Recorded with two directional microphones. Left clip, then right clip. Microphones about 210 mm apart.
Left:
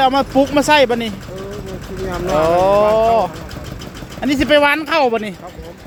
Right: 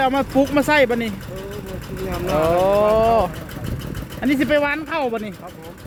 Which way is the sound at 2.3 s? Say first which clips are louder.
Left 4 dB; centre (ahead or behind).